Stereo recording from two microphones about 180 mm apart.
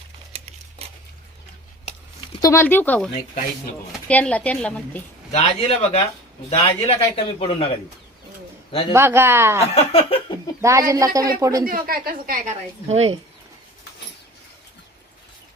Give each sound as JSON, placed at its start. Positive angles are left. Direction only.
{"t": 0.3, "sound": "a sound", "side_deg": -35}
{"t": 2.3, "sound": "a woman's voice", "side_deg": 20}
{"t": 5.3, "sound": "a man's voice", "side_deg": 35}
{"t": 8.9, "sound": "speech", "side_deg": -15}
{"t": 9.6, "sound": "a man's voice", "side_deg": 35}
{"t": 10.6, "sound": "speech", "side_deg": -15}
{"t": 11.6, "sound": "a woman's voice", "side_deg": -55}